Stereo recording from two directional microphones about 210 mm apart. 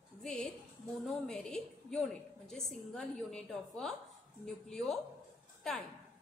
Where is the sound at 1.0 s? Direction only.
5° left (ahead or behind).